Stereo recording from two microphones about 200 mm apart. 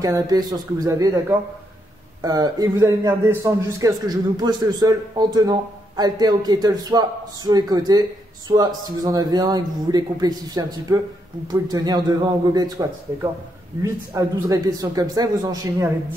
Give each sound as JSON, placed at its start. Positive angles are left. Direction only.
{"t": 0.0, "sound": "a man's voice", "side_deg": -20}